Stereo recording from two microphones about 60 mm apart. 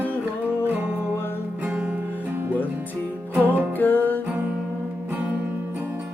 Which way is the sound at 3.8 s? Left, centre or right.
Left.